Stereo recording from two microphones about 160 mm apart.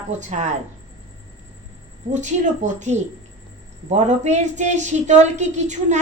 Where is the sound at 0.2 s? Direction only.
45° right (ahead or behind).